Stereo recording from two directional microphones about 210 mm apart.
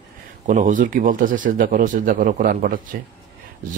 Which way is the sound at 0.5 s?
40° right (ahead or behind).